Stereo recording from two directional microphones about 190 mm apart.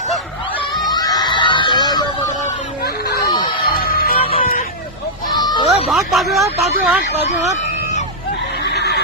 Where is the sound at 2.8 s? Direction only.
55° left (ahead or behind).